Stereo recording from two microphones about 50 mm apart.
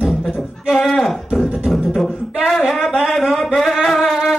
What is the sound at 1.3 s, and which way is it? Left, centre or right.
Beatboxing, centre.